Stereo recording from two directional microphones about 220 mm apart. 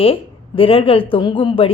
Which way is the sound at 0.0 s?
25° left (ahead or behind).